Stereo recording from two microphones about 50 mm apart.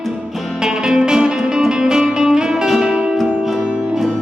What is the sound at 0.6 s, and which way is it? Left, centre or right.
Music, centre.